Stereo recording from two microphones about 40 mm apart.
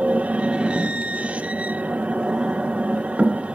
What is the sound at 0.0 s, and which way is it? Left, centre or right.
Train, right.